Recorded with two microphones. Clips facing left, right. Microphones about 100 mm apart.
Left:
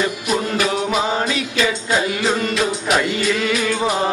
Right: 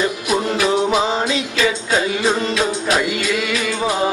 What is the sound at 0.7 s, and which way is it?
Music, 25° right (ahead or behind).